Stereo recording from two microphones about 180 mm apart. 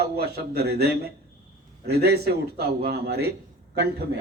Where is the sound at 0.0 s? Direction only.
65° right (ahead or behind).